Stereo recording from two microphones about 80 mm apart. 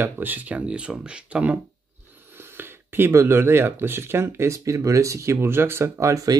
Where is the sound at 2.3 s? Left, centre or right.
Right.